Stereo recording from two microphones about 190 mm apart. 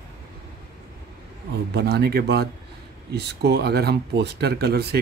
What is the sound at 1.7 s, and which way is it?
Speech, 60° right (ahead or behind).